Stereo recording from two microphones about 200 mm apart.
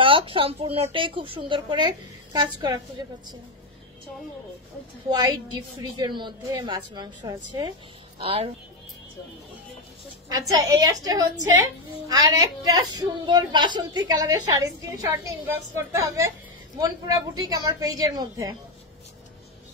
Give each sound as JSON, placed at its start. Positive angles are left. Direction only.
{"t": 0.0, "sound": "a woman's voice", "side_deg": -25}
{"t": 5.8, "sound": "a woman's voice", "side_deg": -25}
{"t": 10.5, "sound": "a woman's voice", "side_deg": -20}